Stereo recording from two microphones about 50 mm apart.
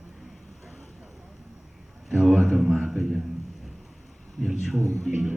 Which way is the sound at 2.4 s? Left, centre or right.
Centre.